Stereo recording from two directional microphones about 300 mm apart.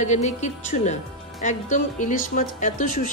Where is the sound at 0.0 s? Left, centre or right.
Left.